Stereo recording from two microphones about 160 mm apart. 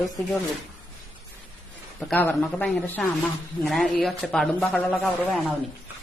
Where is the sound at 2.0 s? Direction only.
5° left (ahead or behind).